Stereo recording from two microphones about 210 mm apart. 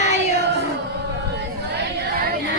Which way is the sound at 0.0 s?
35° left (ahead or behind).